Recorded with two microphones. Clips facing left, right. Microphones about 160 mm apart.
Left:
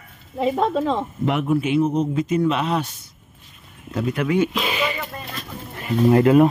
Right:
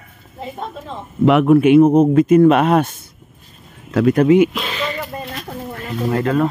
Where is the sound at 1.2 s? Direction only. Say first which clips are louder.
Right 12 dB; 85° right; by 3.0 s 55° right (ahead or behind).